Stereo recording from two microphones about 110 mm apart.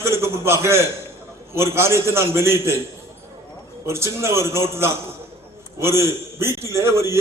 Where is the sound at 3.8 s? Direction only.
25° right (ahead or behind).